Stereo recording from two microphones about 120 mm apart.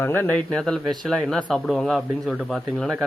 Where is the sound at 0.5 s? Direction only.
5° left (ahead or behind).